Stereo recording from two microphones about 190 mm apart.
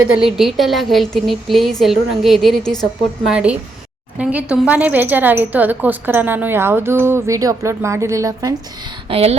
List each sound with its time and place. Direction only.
0.3 s a woman's voice: centre (ahead or behind); by 8.5 s 15° right (ahead or behind)
9.0 s speech: 30° right (ahead or behind)